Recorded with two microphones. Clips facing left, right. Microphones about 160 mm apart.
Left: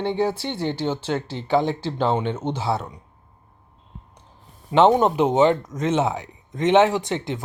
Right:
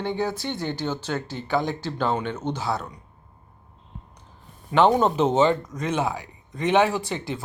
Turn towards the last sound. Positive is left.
turn(degrees=20)  # may be behind; listen again after turning